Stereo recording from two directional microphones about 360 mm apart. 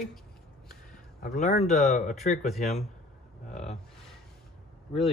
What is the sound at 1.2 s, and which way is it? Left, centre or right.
A man's voice, left.